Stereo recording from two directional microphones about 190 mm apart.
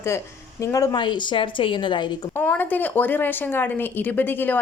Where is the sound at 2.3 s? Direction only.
10° left (ahead or behind).